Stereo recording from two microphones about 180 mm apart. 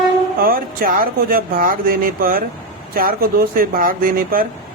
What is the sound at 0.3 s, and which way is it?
Speech, 55° right (ahead or behind).